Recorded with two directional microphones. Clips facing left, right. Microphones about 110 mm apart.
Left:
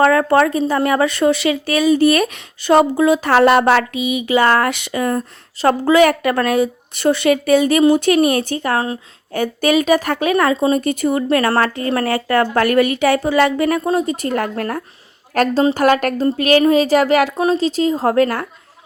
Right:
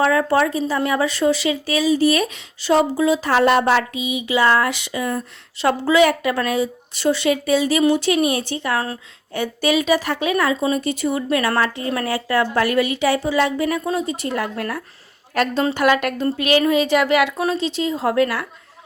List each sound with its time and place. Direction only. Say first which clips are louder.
0.0 s speech: left 4 dB; 55° left (ahead or behind)
13.8 s speech: left 5 dB; 45° left (ahead or behind)
17.3 s speech: left 5 dB; 25° left (ahead or behind)
17.6 s speech: left 5 dB; 40° left (ahead or behind)